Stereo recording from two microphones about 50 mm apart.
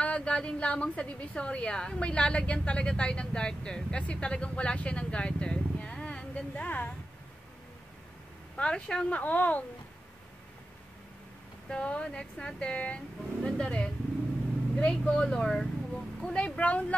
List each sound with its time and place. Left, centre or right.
0.0 s a woman's voice: left
8.5 s speech: centre
9.1 s a woman's voice: left
11.7 s a woman's voice: left
13.4 s speech: centre